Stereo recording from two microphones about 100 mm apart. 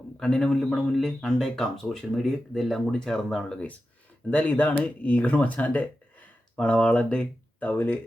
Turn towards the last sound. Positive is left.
turn(degrees=15)  # may be behind; listen again after turning